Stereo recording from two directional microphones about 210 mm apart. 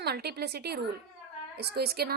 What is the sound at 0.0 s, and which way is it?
A woman's voice, 50° right (ahead or behind).